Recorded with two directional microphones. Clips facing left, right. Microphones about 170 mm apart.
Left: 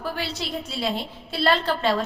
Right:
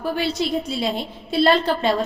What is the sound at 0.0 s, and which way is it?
A woman's voice, 15° right (ahead or behind).